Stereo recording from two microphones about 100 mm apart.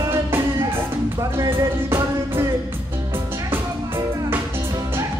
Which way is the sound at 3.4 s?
25° right (ahead or behind).